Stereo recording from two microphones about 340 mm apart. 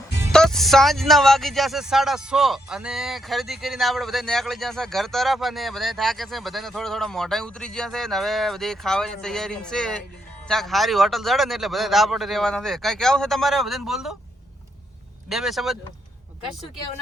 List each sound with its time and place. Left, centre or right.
0.2 s speech: centre
15.3 s speech: centre